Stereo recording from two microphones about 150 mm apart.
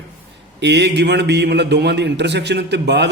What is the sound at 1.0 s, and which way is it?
Speech, 90° right.